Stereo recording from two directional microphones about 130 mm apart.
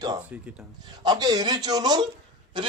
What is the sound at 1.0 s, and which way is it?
A man's voice, 30° right (ahead or behind).